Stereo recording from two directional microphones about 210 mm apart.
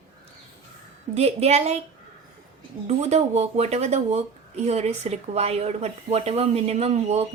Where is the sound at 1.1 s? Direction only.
30° right (ahead or behind).